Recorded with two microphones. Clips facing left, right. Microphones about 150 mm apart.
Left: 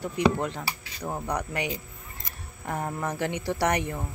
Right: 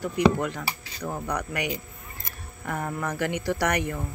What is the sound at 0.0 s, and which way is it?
Speech, 25° left (ahead or behind).